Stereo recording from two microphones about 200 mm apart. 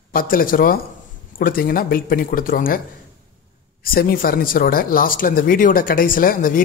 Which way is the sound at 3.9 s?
50° left (ahead or behind).